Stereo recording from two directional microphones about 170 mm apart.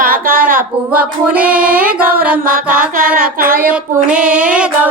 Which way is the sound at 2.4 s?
55° right (ahead or behind).